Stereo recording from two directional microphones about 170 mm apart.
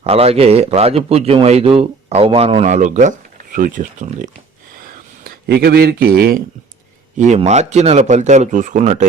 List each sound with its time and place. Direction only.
0.0 s speech: 35° right (ahead or behind)
4.9 s speech: 60° right (ahead or behind)
7.2 s speech: 40° right (ahead or behind)